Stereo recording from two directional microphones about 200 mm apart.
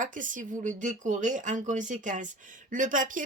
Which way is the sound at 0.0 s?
40° right (ahead or behind).